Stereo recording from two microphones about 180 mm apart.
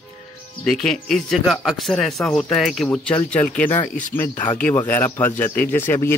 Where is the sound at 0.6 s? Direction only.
Centre (ahead or behind).